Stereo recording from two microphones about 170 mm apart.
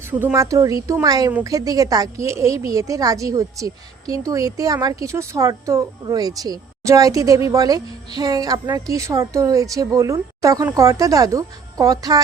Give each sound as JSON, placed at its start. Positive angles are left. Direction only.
{"t": 0.1, "sound": "speech", "side_deg": -10}